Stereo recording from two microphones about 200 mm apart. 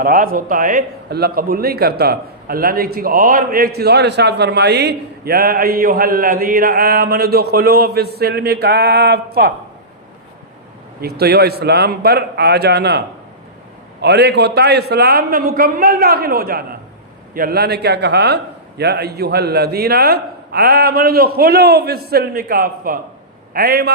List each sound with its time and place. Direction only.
0.0 s a man's voice: 45° right (ahead or behind)
11.0 s a man's voice: 50° right (ahead or behind)
14.0 s a man's voice: 55° right (ahead or behind)